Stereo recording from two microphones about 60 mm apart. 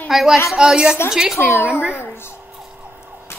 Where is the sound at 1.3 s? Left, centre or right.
Left.